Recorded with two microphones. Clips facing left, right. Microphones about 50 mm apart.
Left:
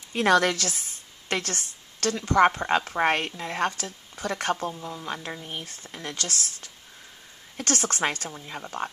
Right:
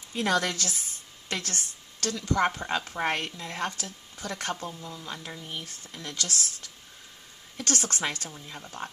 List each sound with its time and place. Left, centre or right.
0.1 s a woman's voice: left
8.3 s a woman's voice: left